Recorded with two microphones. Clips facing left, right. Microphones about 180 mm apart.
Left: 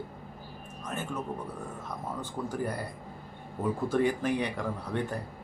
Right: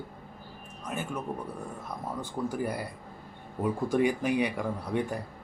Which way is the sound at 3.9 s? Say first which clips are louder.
Right 1 dB; 10° right (ahead or behind).